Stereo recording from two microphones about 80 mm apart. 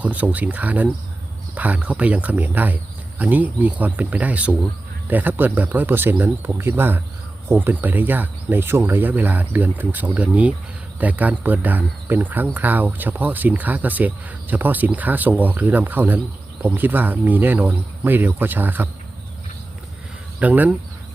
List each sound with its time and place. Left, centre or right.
0.0 s speech: centre
20.4 s speech: centre